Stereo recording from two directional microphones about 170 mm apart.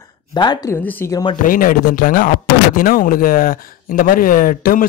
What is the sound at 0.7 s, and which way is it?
Speech, 10° left (ahead or behind).